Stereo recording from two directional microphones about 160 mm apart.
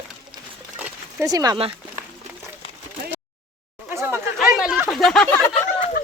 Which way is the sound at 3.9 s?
15° right (ahead or behind).